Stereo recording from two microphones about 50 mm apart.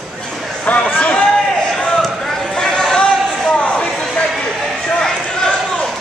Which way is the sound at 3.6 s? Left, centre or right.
Left.